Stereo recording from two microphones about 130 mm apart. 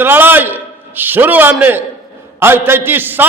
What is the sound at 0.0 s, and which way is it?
A man's voice, 15° right (ahead or behind).